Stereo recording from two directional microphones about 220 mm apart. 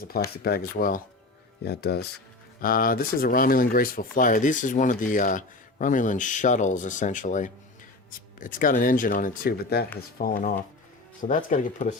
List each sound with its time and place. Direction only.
0.4 s speech: 45° left (ahead or behind)